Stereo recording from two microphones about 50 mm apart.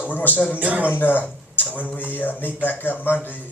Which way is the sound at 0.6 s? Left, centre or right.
Right.